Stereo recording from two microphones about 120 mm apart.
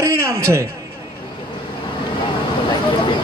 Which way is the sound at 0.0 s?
25° right (ahead or behind).